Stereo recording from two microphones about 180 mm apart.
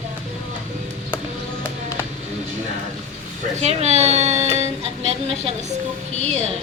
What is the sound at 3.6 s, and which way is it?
Speech, 35° right (ahead or behind).